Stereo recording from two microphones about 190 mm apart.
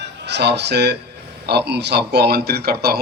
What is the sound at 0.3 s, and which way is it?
A man's voice, 65° right (ahead or behind).